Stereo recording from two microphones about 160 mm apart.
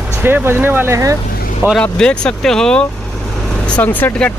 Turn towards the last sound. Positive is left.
turn(degrees=10)  # may be behind; listen again after turning